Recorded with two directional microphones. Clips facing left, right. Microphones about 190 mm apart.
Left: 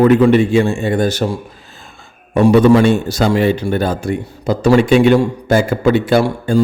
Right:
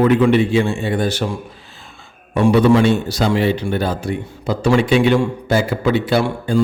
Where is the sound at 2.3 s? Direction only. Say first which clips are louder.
Left 3 dB; 45° left (ahead or behind).